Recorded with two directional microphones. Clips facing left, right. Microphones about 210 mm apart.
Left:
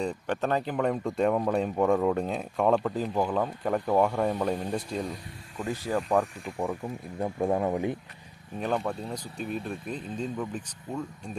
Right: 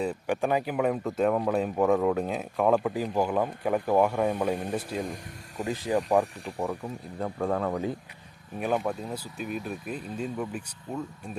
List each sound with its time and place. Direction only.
0.0 s speech: 5° right (ahead or behind)
5.6 s speech: 15° right (ahead or behind)
7.2 s speech: 15° left (ahead or behind)
8.5 s speech: 10° right (ahead or behind)